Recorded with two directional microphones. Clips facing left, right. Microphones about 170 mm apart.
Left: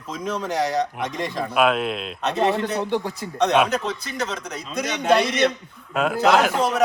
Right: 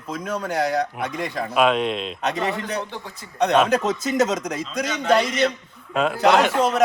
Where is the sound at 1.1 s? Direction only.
Centre (ahead or behind).